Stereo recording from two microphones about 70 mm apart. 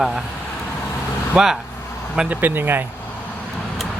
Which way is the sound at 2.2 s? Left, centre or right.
Right.